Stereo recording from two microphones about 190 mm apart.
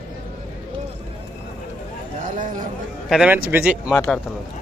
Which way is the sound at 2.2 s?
45° right (ahead or behind).